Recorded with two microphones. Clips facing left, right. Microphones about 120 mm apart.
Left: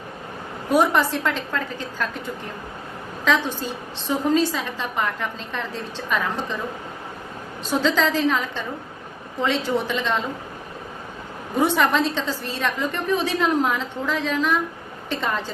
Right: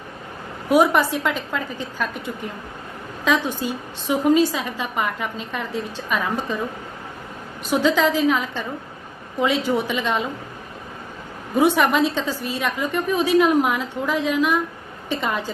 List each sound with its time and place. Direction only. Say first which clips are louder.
0.7 s a woman's voice: right 2 dB; 10° right (ahead or behind)
3.2 s a woman's voice: right 1 dB; 15° right (ahead or behind)
7.6 s a woman's voice: right 2 dB; 15° right (ahead or behind)
11.5 s a woman's voice: right 2 dB; 10° right (ahead or behind)